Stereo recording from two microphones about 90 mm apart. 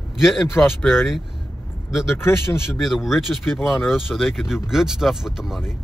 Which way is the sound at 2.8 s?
Centre (ahead or behind).